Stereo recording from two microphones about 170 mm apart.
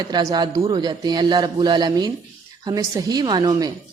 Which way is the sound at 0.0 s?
20° right (ahead or behind).